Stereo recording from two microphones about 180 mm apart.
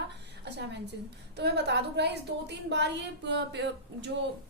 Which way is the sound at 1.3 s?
70° right (ahead or behind).